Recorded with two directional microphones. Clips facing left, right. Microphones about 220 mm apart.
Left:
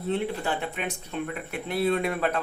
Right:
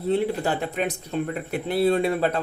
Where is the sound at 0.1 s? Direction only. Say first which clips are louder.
Right 5 dB; 40° right (ahead or behind).